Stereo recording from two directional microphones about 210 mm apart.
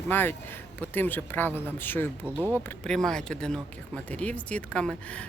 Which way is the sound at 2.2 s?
10° right (ahead or behind).